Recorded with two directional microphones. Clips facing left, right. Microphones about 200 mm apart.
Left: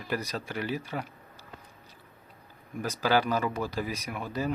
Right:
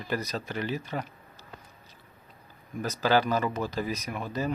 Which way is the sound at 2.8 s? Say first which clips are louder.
Right 1 dB; 10° left (ahead or behind).